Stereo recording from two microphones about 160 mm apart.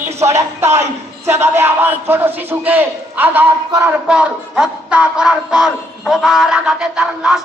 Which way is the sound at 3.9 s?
5° right (ahead or behind).